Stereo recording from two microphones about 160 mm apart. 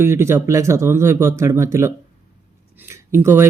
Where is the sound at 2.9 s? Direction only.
15° right (ahead or behind).